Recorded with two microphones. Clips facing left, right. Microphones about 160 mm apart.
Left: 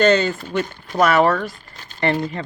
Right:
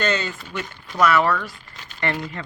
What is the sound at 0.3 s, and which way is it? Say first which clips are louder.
Speech: left 8 dB; 40° left (ahead or behind).